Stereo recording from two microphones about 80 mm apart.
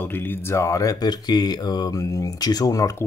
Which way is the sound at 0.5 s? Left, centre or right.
Left.